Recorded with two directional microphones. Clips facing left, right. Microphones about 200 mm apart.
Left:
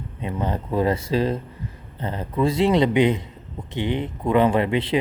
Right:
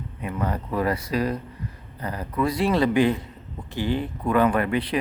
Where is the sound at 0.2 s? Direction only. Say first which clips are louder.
Left 2 dB; 25° left (ahead or behind).